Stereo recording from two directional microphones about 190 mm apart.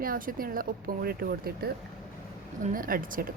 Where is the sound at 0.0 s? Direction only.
50° right (ahead or behind).